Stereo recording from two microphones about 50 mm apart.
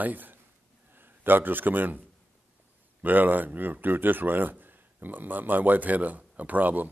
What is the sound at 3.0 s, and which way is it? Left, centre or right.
Speech, right.